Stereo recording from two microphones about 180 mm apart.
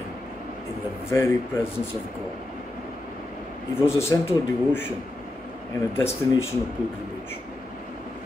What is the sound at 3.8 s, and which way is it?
Speech, 15° left (ahead or behind).